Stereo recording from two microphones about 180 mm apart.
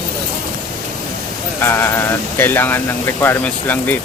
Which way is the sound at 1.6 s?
15° left (ahead or behind).